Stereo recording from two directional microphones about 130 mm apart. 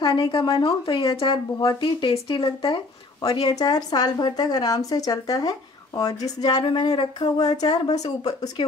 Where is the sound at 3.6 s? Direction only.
30° left (ahead or behind).